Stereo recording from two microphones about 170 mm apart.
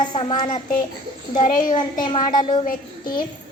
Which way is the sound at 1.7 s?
25° left (ahead or behind).